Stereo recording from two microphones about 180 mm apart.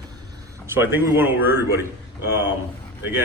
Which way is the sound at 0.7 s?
10° right (ahead or behind).